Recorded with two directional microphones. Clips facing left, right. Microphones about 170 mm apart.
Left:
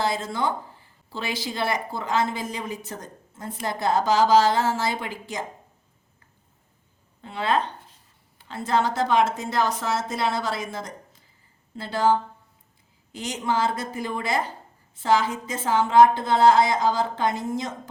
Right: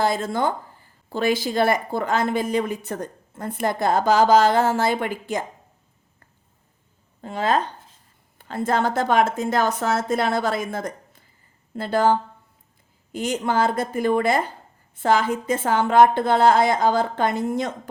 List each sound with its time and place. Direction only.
0.0 s a woman's voice: 50° right (ahead or behind)
7.2 s a woman's voice: 45° right (ahead or behind)
13.1 s a woman's voice: 55° right (ahead or behind)